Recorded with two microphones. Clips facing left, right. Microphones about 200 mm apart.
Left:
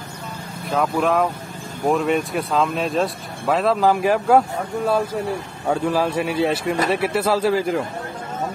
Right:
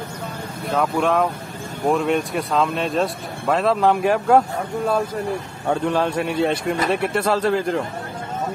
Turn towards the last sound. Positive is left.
turn(degrees=5)  # may be behind; listen again after turning